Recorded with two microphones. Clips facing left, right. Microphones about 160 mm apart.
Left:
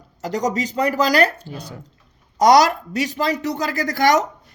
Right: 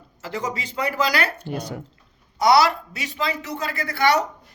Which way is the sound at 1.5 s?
65° right (ahead or behind).